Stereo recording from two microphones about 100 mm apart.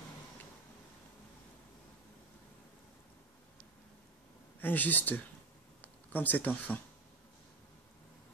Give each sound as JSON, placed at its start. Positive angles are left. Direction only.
{"t": 4.6, "sound": "speech", "side_deg": 20}